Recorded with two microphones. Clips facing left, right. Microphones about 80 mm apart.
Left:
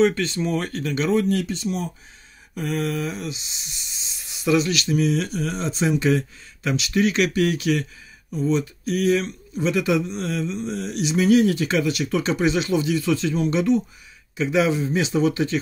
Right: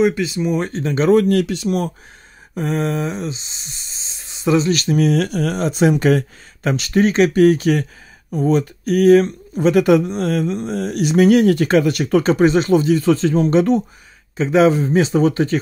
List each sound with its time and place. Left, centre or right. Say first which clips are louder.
0.0 s speech: right 3 dB; centre
0.6 s speech: right 5 dB; right
1.0 s speech: right 8 dB; right
2.5 s a sound: right 5 dB; right
8.3 s speech: right 5 dB; right
14.3 s a sound: right 7 dB; right